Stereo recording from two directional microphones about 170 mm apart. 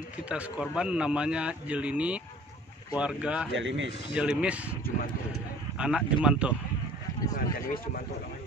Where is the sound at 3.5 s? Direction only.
90° right.